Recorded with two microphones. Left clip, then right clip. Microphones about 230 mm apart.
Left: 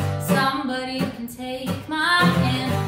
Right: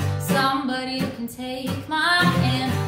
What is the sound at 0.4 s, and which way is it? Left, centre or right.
Music, centre.